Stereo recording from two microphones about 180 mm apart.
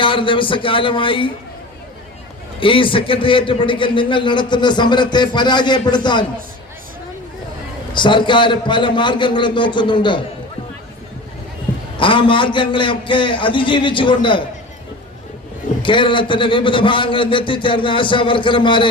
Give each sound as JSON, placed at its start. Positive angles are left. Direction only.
{"t": 0.0, "sound": "a man's voice", "side_deg": 30}
{"t": 2.6, "sound": "a man's voice", "side_deg": 30}
{"t": 7.9, "sound": "a man's voice", "side_deg": 25}
{"t": 11.9, "sound": "a man's voice", "side_deg": 30}
{"t": 15.8, "sound": "a man's voice", "side_deg": 25}